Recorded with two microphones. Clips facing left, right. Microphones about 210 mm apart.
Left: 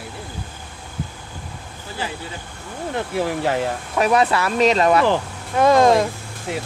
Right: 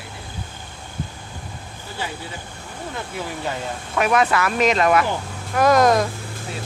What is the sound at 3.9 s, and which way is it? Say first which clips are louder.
A woman's voice: left 1 dB; 35° left (ahead or behind).